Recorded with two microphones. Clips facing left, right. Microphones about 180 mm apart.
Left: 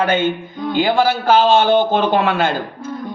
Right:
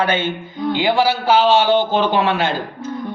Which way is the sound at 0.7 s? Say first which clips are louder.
Left 2 dB; 50° left (ahead or behind).